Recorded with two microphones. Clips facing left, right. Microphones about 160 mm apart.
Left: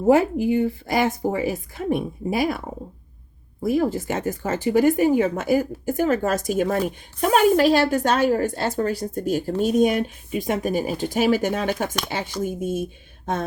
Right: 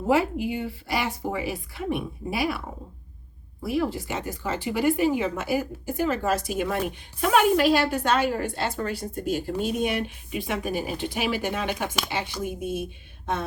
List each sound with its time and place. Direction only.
0.1 s speech: 45° left (ahead or behind)
3.6 s speech: 45° left (ahead or behind)